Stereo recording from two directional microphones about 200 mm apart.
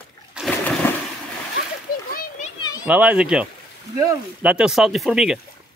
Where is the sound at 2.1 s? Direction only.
40° left (ahead or behind).